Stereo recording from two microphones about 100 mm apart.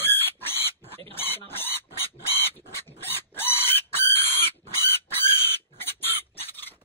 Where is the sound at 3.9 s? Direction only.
25° left (ahead or behind).